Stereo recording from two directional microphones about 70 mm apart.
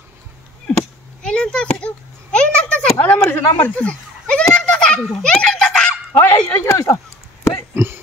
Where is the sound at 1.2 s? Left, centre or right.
Centre.